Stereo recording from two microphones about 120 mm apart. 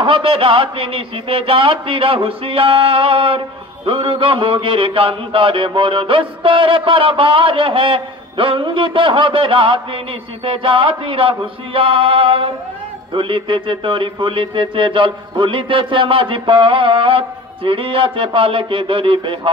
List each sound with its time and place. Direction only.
0.0 s a man's voice: 50° right (ahead or behind)